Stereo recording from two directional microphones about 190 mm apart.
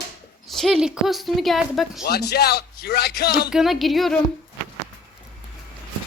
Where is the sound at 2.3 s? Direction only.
55° left (ahead or behind).